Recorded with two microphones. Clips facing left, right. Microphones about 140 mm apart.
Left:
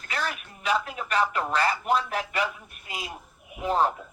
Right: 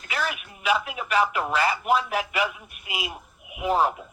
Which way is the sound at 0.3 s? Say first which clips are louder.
Right 3 dB; 10° right (ahead or behind).